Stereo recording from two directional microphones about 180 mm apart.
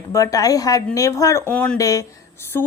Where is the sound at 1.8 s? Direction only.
20° left (ahead or behind).